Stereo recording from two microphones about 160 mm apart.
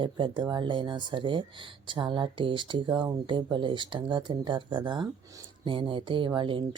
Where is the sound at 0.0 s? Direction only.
30° right (ahead or behind).